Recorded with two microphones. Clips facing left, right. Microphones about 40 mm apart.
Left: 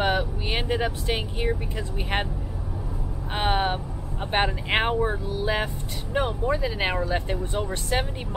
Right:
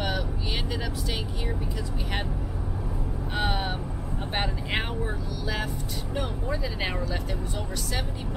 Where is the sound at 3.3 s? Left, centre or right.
Left.